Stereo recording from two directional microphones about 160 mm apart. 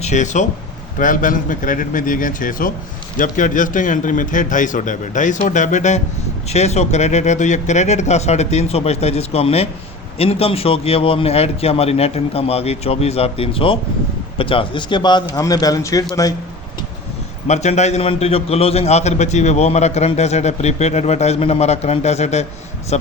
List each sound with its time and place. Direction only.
0.0 s a man's voice: 50° left (ahead or behind); by 16.0 s 20° left (ahead or behind)
17.5 s a man's voice: 45° left (ahead or behind)